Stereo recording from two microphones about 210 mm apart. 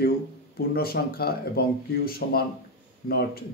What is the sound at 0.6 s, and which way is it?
Speech, 45° left (ahead or behind).